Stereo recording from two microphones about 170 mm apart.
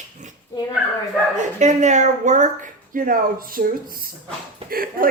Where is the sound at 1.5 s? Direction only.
45° right (ahead or behind).